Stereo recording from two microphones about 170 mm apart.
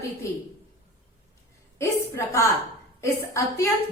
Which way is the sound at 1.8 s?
15° left (ahead or behind).